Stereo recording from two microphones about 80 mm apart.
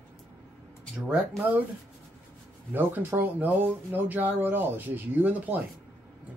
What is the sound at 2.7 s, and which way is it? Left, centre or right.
Speech, right.